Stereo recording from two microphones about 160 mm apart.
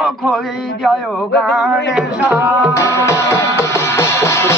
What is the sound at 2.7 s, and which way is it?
Music, 20° left (ahead or behind).